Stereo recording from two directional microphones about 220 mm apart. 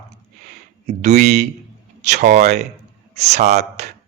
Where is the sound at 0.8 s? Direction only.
30° right (ahead or behind).